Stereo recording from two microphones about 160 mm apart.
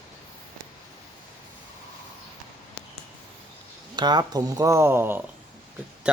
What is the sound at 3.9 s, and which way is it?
Speech, 25° right (ahead or behind).